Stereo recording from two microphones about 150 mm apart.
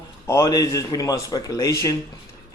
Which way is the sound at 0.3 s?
20° left (ahead or behind).